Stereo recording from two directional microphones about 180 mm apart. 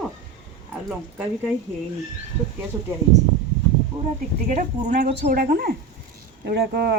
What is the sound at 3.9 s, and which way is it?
Speech, 35° right (ahead or behind).